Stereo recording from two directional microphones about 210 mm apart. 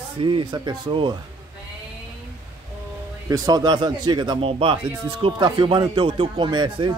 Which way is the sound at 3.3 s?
20° right (ahead or behind).